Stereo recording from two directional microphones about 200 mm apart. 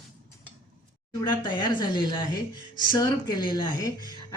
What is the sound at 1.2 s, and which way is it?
A woman's voice, 25° left (ahead or behind).